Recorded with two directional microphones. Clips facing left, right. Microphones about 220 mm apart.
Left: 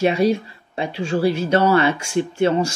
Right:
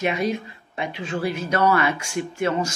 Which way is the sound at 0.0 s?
30° left (ahead or behind).